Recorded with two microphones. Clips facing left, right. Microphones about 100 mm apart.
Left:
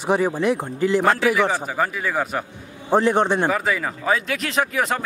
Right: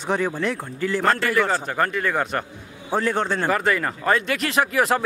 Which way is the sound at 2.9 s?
20° left (ahead or behind).